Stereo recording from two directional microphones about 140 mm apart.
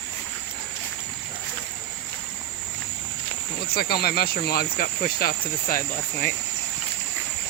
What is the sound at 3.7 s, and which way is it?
Speech, 90° left.